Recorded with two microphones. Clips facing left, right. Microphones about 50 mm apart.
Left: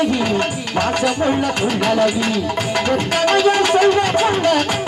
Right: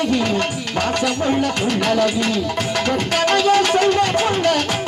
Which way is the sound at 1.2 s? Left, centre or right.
Centre.